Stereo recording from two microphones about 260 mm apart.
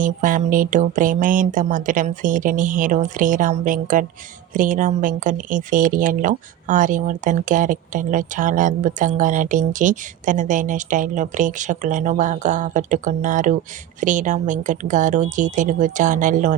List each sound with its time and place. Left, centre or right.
0.0 s speech: right